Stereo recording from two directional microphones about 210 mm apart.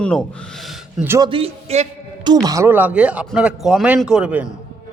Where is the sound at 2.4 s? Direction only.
15° right (ahead or behind).